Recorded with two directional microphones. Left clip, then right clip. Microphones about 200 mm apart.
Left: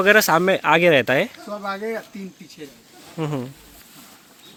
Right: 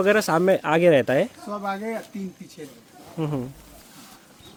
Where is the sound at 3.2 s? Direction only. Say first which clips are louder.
Left 2 dB; centre (ahead or behind).